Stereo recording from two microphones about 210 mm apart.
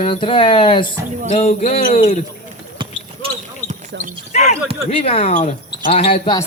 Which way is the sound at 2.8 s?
25° right (ahead or behind).